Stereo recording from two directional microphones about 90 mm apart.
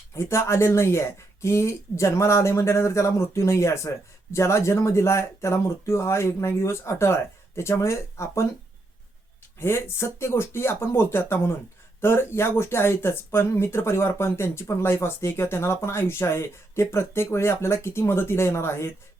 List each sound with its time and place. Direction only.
0.2 s speech: 30° left (ahead or behind)
9.6 s speech: 25° left (ahead or behind)